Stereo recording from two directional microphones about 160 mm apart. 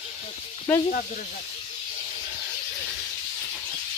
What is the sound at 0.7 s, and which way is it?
Speech, 10° left (ahead or behind).